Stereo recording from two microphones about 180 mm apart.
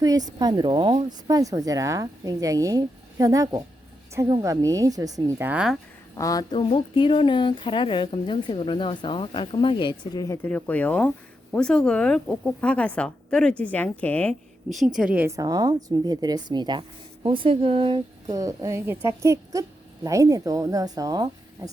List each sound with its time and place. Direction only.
0.0 s speech: 20° right (ahead or behind)
6.1 s speech: 20° left (ahead or behind); by 21.7 s 20° right (ahead or behind)